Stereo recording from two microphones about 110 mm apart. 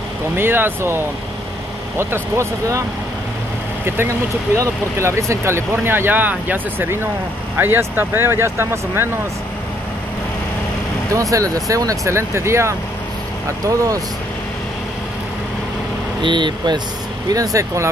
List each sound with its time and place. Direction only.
0.4 s speech: 20° right (ahead or behind)
3.8 s speech: 20° right (ahead or behind)
11.1 s speech: 30° right (ahead or behind)
16.2 s speech: 45° right (ahead or behind)
17.3 s speech: 30° right (ahead or behind)